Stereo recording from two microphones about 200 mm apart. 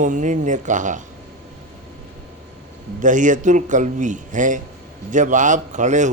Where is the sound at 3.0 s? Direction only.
40° right (ahead or behind).